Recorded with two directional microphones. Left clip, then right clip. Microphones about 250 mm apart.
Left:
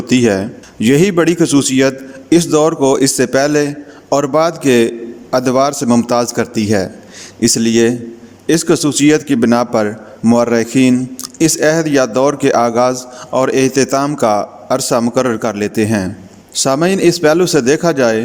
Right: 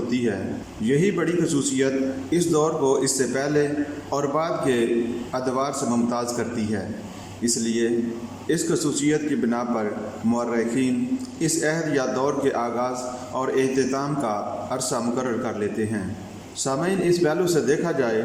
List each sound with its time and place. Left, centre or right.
0.1 s a man's voice: left